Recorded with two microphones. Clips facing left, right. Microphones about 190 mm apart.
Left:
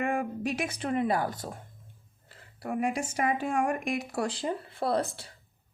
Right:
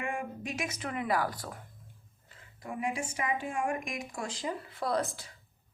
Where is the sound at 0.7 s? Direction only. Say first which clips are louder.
Left 3 dB; 30° left (ahead or behind).